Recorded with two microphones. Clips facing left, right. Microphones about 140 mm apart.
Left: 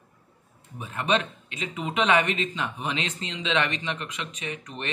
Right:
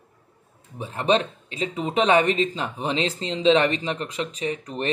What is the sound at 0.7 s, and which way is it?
A man's voice, 30° right (ahead or behind).